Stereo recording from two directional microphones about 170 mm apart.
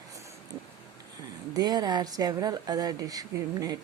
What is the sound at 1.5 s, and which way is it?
Speech, 25° right (ahead or behind).